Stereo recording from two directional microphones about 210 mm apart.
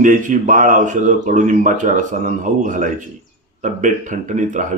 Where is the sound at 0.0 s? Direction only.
40° right (ahead or behind).